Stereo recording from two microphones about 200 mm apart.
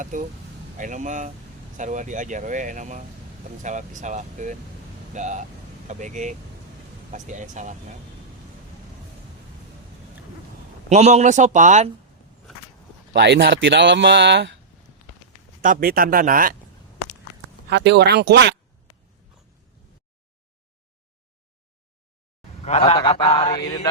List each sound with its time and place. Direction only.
0.0 s speech: 40° right (ahead or behind)
10.8 s speech: 35° right (ahead or behind)
13.1 s speech: 60° right (ahead or behind)
15.6 s speech: 45° right (ahead or behind)
17.7 s speech: 60° right (ahead or behind)
22.6 s a sound: 30° left (ahead or behind)
23.6 s mantra: 15° left (ahead or behind)